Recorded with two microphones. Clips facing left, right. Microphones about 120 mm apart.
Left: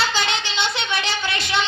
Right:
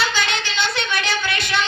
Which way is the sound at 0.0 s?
30° left (ahead or behind).